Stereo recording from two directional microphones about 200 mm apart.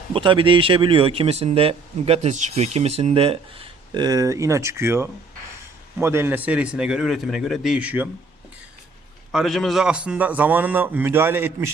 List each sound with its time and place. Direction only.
0.1 s a man's voice: 25° right (ahead or behind); by 8.1 s 10° right (ahead or behind)
9.3 s a man's voice: centre (ahead or behind)